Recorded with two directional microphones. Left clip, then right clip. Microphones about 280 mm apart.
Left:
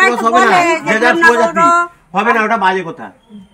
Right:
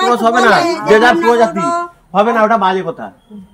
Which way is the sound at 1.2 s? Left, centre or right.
Centre.